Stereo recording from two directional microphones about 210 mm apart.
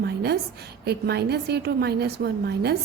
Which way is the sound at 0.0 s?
50° right (ahead or behind).